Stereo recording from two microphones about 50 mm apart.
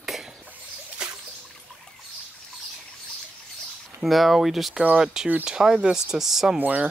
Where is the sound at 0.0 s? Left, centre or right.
Centre.